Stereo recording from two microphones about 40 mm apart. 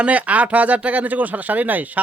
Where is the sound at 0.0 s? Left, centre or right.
Right.